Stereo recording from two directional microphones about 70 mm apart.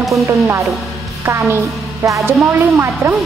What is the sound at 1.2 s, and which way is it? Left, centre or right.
Music, right.